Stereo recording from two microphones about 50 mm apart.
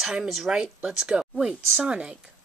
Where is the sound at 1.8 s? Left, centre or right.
Right.